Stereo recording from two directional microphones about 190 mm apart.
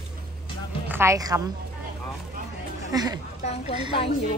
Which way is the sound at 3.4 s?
30° left (ahead or behind).